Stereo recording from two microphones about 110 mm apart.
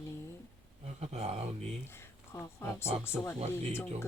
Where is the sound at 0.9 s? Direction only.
70° right (ahead or behind).